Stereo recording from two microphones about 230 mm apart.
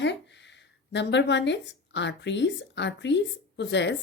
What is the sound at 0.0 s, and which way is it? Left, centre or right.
A woman's voice, left.